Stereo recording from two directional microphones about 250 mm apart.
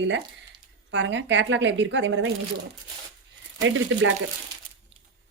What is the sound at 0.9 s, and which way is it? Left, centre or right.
Speech, right.